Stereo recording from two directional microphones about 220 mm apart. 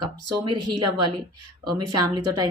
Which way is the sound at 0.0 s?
20° right (ahead or behind).